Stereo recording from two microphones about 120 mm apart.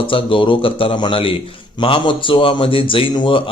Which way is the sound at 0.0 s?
45° left (ahead or behind).